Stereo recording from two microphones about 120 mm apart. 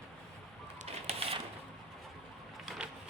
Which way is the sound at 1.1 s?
55° right (ahead or behind).